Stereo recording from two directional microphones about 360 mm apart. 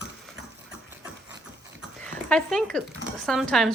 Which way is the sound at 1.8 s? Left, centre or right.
Centre.